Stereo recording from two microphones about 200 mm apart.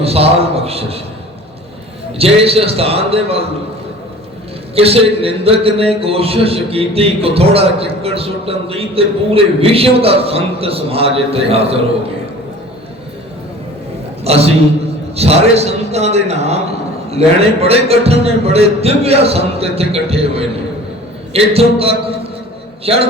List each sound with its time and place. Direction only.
0.0 s a man's voice: 30° right (ahead or behind)
2.1 s a man's voice: 30° right (ahead or behind)
4.7 s a man's voice: 30° right (ahead or behind)
14.3 s a man's voice: 30° right (ahead or behind)